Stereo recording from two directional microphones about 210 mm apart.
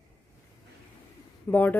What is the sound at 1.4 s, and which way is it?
Speech, 10° left (ahead or behind).